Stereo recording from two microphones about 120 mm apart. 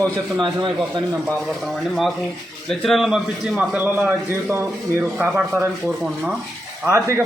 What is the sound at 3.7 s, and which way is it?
Speech, 15° right (ahead or behind).